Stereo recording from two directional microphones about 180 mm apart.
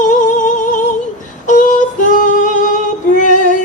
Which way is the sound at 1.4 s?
45° left (ahead or behind).